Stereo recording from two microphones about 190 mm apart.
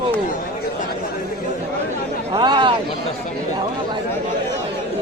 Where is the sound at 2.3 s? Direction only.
25° right (ahead or behind).